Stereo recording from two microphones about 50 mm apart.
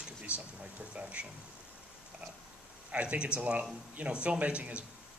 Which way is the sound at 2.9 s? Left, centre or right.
Right.